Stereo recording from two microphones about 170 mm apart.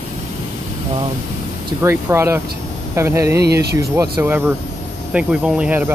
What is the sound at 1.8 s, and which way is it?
Speech, 15° right (ahead or behind).